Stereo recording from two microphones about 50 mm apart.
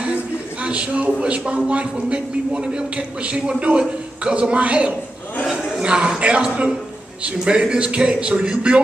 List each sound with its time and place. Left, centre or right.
0.0 s a man's voice: right